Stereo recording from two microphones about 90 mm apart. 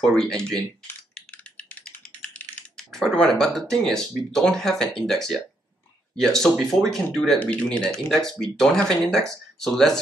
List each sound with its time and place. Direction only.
0.0 s speech: 5° left (ahead or behind)
1.3 s computer keyboard: 15° left (ahead or behind)
2.8 s speech: 5° left (ahead or behind)